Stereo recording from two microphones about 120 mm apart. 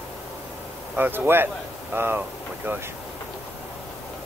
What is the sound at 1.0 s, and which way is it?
Speech, 15° right (ahead or behind).